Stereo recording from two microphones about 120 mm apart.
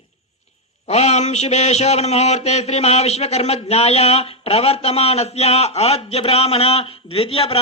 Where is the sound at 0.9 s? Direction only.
65° left (ahead or behind).